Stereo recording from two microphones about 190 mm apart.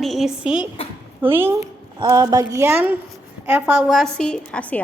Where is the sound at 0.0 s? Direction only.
Centre (ahead or behind).